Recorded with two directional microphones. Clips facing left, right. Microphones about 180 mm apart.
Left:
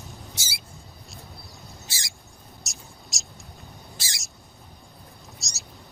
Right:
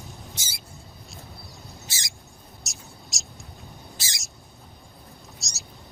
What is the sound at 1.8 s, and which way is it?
Bird, 20° right (ahead or behind).